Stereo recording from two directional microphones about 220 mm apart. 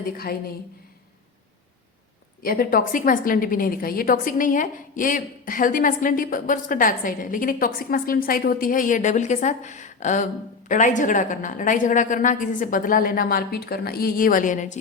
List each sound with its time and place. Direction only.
0.0 s a woman's voice: 45° left (ahead or behind)
2.4 s a woman's voice: 40° left (ahead or behind)